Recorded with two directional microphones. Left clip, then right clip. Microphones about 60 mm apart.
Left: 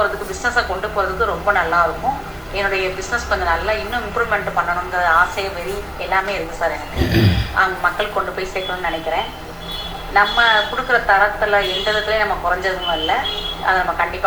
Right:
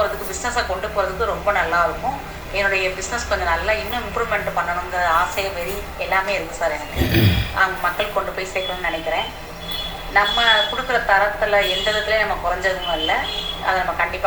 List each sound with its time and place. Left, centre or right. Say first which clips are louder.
0.0 s a woman's voice: left 3 dB; right
6.7 s speech: even; centre
7.5 s a woman's voice: left 3 dB; right